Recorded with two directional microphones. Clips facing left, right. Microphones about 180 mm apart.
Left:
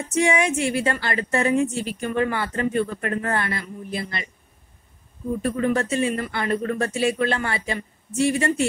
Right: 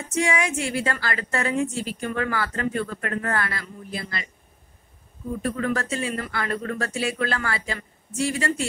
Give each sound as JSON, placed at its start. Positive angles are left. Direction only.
{"t": 0.2, "sound": "speech", "side_deg": 25}
{"t": 5.4, "sound": "speech", "side_deg": 20}